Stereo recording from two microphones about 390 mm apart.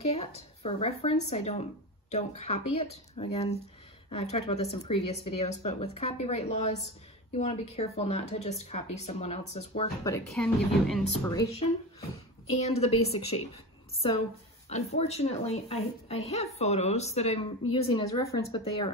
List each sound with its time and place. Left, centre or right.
0.1 s speech: centre
12.5 s speech: centre
14.7 s speech: centre